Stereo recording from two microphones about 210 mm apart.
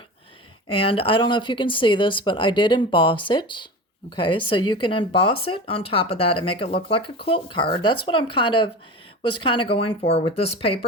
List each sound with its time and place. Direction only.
0.7 s speech: 25° left (ahead or behind)